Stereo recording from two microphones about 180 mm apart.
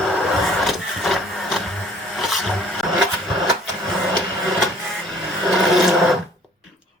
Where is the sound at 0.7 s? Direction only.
Centre (ahead or behind).